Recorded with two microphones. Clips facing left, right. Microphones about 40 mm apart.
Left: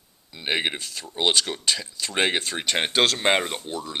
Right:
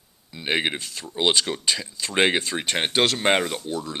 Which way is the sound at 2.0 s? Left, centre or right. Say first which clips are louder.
Right 4 dB; right.